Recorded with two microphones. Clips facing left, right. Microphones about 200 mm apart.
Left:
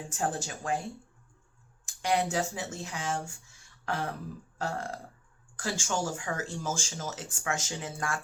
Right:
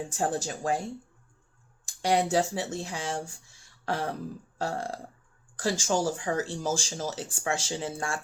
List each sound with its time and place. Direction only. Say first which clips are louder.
0.1 s speech: right 1 dB; 35° right (ahead or behind)
1.8 s a sound: right 3 dB; 35° right (ahead or behind)
2.3 s speech: right 5 dB; 35° right (ahead or behind)
4.5 s burping: right 2 dB; 35° right (ahead or behind)
5.5 s speech: right 5 dB; 35° right (ahead or behind)